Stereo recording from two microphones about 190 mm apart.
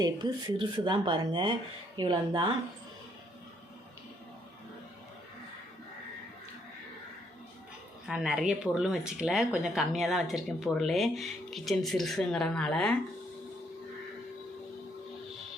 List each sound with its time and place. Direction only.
0.0 s speech: 20° right (ahead or behind)
8.0 s speech: 5° right (ahead or behind)